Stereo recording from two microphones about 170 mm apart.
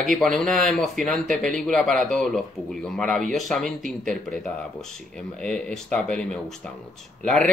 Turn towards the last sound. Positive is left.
turn(degrees=5)  # may be behind; listen again after turning